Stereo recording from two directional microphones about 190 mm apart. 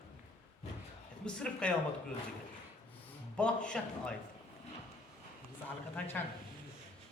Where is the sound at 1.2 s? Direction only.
5° left (ahead or behind).